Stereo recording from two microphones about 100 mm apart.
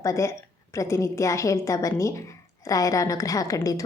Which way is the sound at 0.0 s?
30° left (ahead or behind).